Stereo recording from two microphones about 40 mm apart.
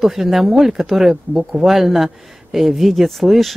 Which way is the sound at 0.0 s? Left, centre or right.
Centre.